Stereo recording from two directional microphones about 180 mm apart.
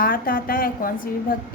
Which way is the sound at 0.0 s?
50° left (ahead or behind).